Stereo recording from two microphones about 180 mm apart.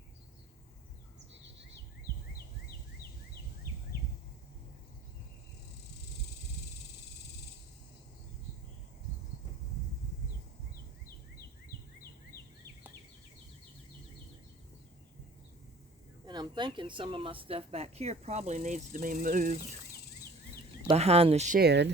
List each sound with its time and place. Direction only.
16.2 s a woman's voice: 25° right (ahead or behind); by 19.7 s 45° right (ahead or behind)
20.8 s a woman's voice: 35° right (ahead or behind)
21.6 s speech: 70° right (ahead or behind)